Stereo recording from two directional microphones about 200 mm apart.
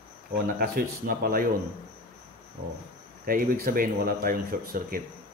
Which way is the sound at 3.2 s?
50° right (ahead or behind).